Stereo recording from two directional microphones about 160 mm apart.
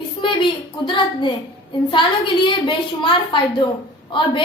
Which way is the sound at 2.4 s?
30° left (ahead or behind).